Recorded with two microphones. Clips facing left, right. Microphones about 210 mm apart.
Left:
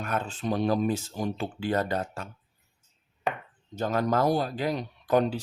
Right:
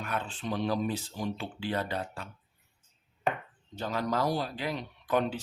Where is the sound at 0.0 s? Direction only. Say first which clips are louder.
Left 4 dB; 45° left (ahead or behind).